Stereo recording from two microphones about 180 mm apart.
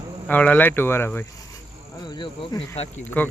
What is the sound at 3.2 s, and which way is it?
Speech, 10° left (ahead or behind).